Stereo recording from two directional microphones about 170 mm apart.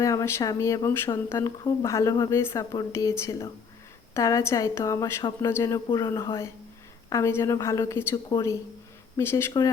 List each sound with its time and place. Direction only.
0.0 s speech: 20° left (ahead or behind)